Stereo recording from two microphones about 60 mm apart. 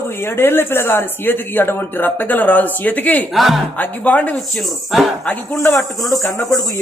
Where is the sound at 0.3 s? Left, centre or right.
Left.